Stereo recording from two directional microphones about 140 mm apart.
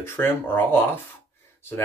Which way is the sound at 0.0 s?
15° left (ahead or behind).